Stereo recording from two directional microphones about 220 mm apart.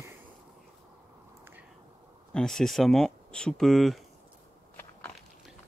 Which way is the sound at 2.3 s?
5° left (ahead or behind).